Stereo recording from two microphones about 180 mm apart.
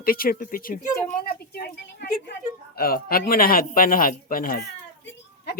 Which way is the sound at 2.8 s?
55° left (ahead or behind).